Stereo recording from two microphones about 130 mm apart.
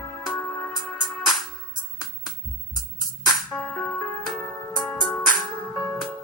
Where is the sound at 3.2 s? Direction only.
Centre (ahead or behind).